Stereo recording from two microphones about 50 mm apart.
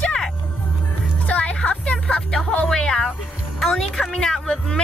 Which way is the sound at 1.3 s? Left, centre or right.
Left.